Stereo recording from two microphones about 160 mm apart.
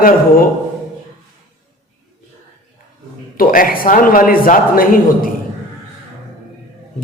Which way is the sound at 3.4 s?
65° left (ahead or behind).